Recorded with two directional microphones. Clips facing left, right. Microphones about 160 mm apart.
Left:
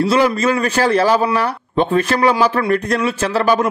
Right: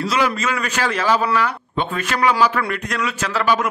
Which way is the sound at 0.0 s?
30° left (ahead or behind).